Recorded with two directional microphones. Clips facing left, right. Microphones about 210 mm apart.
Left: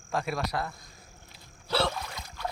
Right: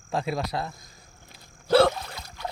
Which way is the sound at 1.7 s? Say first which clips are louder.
Right 10 dB; 45° right (ahead or behind).